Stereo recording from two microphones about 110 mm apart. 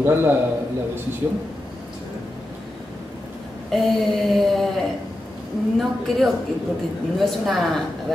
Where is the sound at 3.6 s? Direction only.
5° left (ahead or behind).